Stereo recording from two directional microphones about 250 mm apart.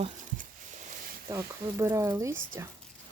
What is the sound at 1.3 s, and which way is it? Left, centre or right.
Speech, centre.